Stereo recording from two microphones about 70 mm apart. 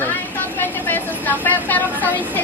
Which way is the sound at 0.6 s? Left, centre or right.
Left.